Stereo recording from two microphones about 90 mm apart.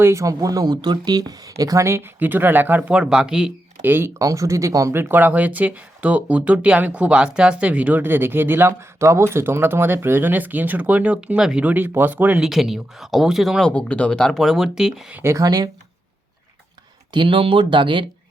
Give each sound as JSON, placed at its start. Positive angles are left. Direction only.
{"t": 0.0, "sound": "speech", "side_deg": -35}
{"t": 2.9, "sound": "speech", "side_deg": -5}
{"t": 3.8, "sound": "speech", "side_deg": -25}
{"t": 4.2, "sound": "speech", "side_deg": -35}
{"t": 12.4, "sound": "speech", "side_deg": 0}
{"t": 13.7, "sound": "speech", "side_deg": 15}
{"t": 15.2, "sound": "speech", "side_deg": -35}
{"t": 15.4, "sound": "speech", "side_deg": -45}
{"t": 17.1, "sound": "speech", "side_deg": -65}